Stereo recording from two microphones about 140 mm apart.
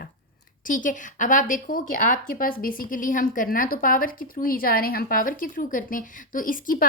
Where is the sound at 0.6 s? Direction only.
70° left (ahead or behind).